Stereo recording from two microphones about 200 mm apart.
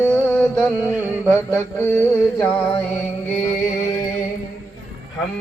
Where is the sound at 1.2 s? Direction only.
10° left (ahead or behind).